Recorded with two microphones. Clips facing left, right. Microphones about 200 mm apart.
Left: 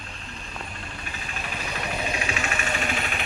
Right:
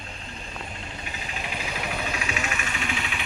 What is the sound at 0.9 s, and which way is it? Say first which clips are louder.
Vehicle: right 1 dB; 20° right (ahead or behind).